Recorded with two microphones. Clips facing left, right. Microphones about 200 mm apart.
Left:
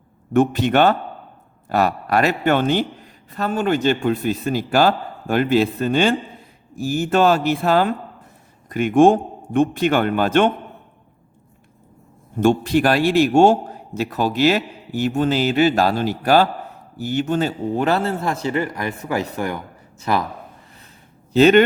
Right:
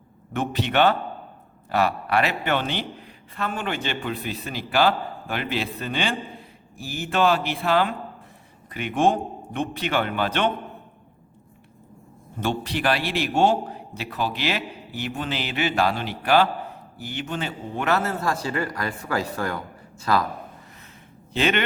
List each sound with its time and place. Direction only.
0.3 s a man's voice: 45° left (ahead or behind)
12.4 s a man's voice: 45° left (ahead or behind); by 20.2 s 20° left (ahead or behind)
21.3 s speech: 40° left (ahead or behind)